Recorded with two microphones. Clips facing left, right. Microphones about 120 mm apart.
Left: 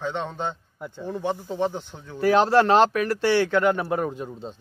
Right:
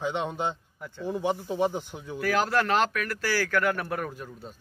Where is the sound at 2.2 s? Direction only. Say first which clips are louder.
Left 8 dB; 30° left (ahead or behind).